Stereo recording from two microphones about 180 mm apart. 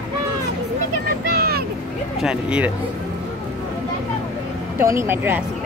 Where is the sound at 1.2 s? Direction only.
60° right (ahead or behind).